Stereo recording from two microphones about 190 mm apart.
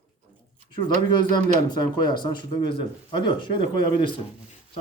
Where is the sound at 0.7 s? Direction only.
25° left (ahead or behind).